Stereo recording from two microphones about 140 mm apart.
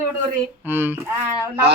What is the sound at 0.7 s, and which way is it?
Speech, 15° right (ahead or behind).